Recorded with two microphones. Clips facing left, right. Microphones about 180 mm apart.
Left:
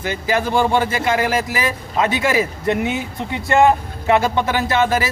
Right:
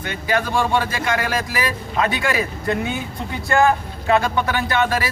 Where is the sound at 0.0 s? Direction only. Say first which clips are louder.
Left 2 dB; 25° left (ahead or behind).